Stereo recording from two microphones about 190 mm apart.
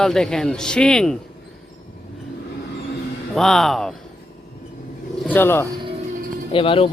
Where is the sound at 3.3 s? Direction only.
Centre (ahead or behind).